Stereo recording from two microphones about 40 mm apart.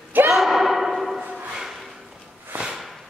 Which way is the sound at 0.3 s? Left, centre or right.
Centre.